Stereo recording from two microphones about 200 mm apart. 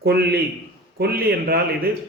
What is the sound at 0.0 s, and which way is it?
A man's voice, 50° right (ahead or behind).